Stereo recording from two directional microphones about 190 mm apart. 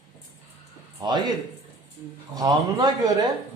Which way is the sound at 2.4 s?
20° right (ahead or behind).